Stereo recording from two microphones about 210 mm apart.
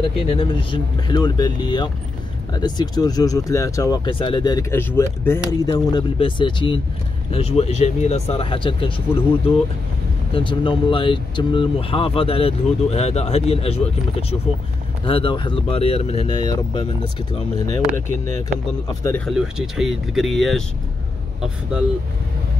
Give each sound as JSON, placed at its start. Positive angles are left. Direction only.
{"t": 0.0, "sound": "speech", "side_deg": 25}
{"t": 10.3, "sound": "speech", "side_deg": 25}
{"t": 17.9, "sound": "speech", "side_deg": -35}
{"t": 18.9, "sound": "speech", "side_deg": 15}
{"t": 19.2, "sound": "speech", "side_deg": 0}